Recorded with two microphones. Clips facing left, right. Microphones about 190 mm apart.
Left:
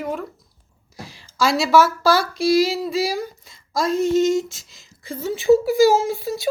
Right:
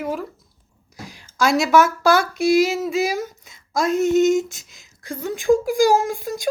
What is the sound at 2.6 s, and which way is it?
Speech, centre (ahead or behind).